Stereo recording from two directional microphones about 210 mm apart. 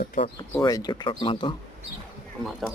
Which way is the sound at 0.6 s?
20° left (ahead or behind).